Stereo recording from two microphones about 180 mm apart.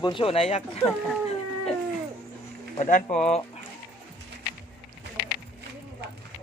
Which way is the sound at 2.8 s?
45° left (ahead or behind).